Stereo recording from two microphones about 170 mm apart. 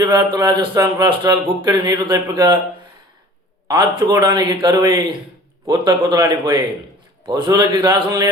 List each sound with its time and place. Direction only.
0.0 s speech: 25° right (ahead or behind)
0.7 s speech: 15° right (ahead or behind)
1.0 s speech: 25° right (ahead or behind)
3.7 s speech: 25° right (ahead or behind)